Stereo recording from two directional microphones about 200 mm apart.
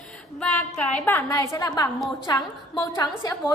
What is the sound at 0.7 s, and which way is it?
A woman's voice, 5° left (ahead or behind).